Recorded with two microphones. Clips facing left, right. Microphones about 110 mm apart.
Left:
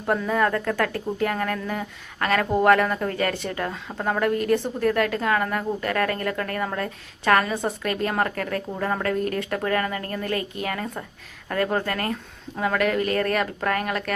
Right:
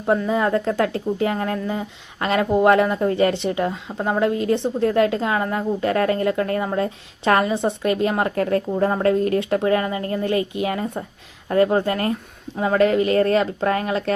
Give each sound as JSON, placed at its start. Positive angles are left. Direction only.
{"t": 0.0, "sound": "a woman's voice", "side_deg": -15}
{"t": 8.4, "sound": "a woman's voice", "side_deg": -30}